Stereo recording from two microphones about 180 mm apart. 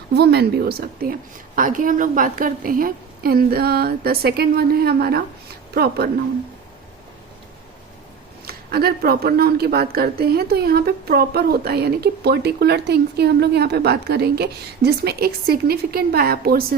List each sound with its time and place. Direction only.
0.1 s a woman's voice: 65° right (ahead or behind)
8.4 s a woman's voice: 60° right (ahead or behind)